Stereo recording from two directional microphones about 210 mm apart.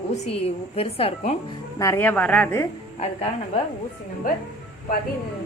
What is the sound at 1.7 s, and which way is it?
Speech, 15° left (ahead or behind).